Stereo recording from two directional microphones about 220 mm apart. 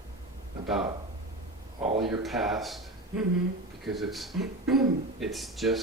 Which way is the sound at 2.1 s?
Centre (ahead or behind).